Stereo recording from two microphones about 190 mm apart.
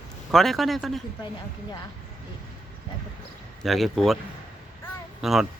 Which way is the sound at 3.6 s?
Centre (ahead or behind).